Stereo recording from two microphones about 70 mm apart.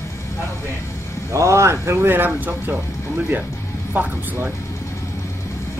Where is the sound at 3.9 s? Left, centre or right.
Right.